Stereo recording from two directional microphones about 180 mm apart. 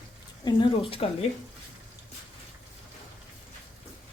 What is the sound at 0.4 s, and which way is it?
Speech, 30° left (ahead or behind).